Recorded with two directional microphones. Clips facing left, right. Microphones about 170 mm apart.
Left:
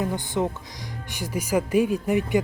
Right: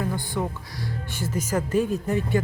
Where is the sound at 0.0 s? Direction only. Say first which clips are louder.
Left 2 dB; 20° left (ahead or behind).